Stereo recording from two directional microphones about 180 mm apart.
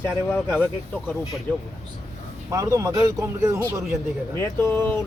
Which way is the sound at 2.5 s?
20° right (ahead or behind).